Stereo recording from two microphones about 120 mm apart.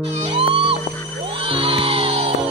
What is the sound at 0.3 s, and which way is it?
Music, 50° right (ahead or behind).